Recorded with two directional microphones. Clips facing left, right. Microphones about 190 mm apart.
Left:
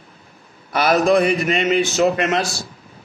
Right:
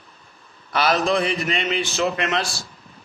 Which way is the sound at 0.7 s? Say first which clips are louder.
Left 5 dB; 50° left (ahead or behind).